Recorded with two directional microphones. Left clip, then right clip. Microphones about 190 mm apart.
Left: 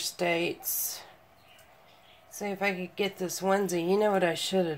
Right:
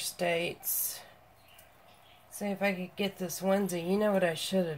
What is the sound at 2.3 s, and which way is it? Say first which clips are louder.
Speech: left 2 dB; 40° left (ahead or behind).